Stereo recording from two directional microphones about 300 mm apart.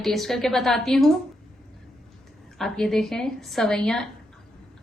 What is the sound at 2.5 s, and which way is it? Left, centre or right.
Speech, centre.